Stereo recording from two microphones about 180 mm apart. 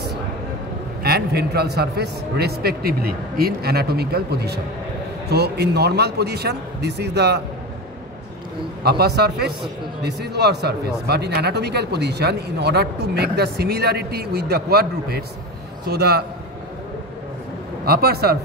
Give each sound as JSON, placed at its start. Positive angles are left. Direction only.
{"t": 1.0, "sound": "speech", "side_deg": -60}
{"t": 8.8, "sound": "speech", "side_deg": -65}
{"t": 17.8, "sound": "speech", "side_deg": -60}